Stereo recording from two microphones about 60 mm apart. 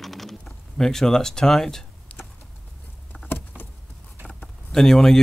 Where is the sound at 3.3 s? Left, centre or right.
Left.